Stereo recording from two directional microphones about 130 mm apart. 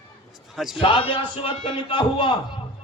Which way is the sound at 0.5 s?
Centre (ahead or behind).